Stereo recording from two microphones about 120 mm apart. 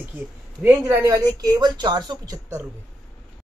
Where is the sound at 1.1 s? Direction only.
35° right (ahead or behind).